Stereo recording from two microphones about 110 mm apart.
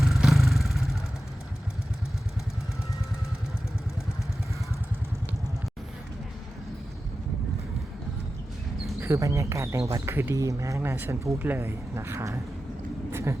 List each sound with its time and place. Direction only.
0.0 s vehicle: 5° right (ahead or behind)
9.0 s speech: 25° right (ahead or behind)
10.8 s speech: 20° right (ahead or behind)
13.1 s a sound: 20° right (ahead or behind)